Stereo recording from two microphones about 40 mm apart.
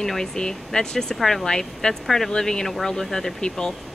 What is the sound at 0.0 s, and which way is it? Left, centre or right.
Speech, centre.